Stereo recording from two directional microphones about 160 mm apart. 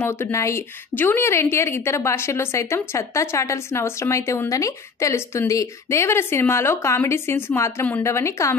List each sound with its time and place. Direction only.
0.0 s a woman's voice: 15° left (ahead or behind)